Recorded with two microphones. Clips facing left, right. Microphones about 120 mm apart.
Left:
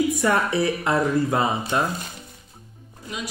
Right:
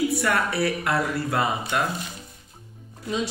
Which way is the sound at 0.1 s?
20° left (ahead or behind).